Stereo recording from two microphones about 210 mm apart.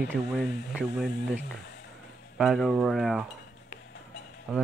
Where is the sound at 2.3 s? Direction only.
Centre (ahead or behind).